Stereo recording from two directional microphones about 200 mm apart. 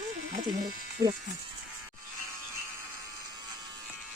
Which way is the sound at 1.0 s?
15° right (ahead or behind).